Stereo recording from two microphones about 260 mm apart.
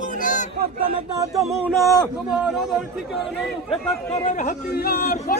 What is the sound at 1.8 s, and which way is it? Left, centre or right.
Speech, centre.